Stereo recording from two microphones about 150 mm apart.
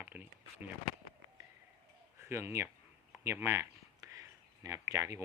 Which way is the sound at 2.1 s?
15° right (ahead or behind).